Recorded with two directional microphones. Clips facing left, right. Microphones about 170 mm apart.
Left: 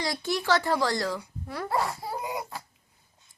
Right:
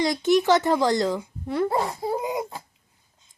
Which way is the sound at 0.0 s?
20° right (ahead or behind).